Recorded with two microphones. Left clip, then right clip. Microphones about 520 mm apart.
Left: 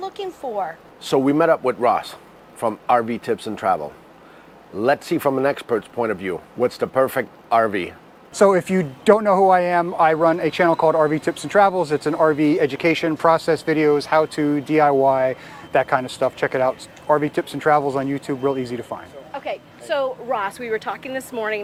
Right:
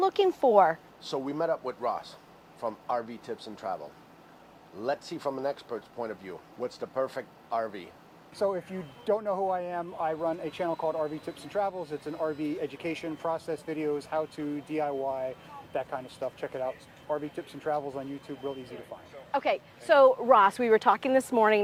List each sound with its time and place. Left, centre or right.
0.0 s speech: right
1.1 s speech: left
4.8 s speech: left
8.4 s speech: left
19.3 s a woman's voice: right